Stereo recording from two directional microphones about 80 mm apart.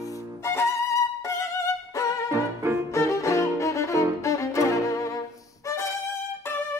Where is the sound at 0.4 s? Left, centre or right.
Left.